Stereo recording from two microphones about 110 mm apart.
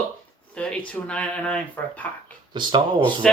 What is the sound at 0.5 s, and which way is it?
Speech, 10° left (ahead or behind).